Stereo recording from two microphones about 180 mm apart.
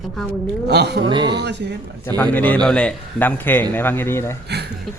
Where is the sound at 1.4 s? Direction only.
70° right (ahead or behind).